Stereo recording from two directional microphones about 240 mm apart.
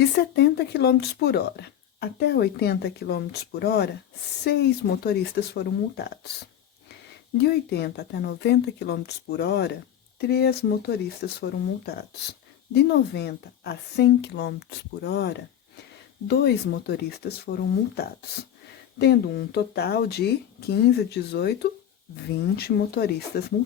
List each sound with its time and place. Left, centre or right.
0.0 s speech: left
7.3 s speech: left